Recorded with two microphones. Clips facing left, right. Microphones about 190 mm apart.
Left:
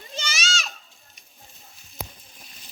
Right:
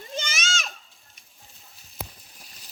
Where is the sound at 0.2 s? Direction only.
50° right (ahead or behind).